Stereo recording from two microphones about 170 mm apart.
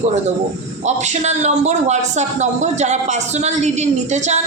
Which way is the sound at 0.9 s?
40° right (ahead or behind).